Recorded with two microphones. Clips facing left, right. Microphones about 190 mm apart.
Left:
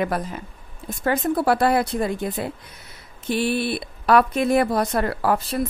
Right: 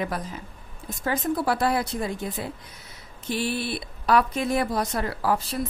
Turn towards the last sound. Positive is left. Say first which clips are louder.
# left 3 dB
turn(degrees=60)  # may be behind; listen again after turning